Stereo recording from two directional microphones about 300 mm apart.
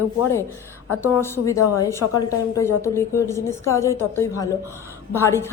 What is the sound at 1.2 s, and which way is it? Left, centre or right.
A woman's voice, centre.